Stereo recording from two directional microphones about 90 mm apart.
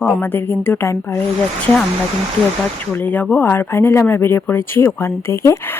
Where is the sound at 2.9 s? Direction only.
20° left (ahead or behind).